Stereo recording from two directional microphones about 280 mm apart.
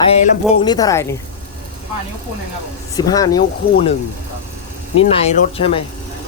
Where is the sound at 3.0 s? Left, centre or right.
Centre.